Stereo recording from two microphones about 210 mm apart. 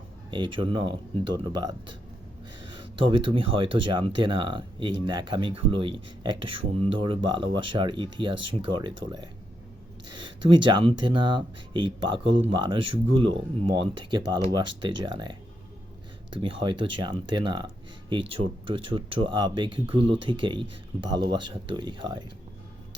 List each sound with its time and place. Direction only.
0.3 s speech: 20° right (ahead or behind)